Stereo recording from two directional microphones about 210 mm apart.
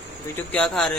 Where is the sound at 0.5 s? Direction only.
5° left (ahead or behind).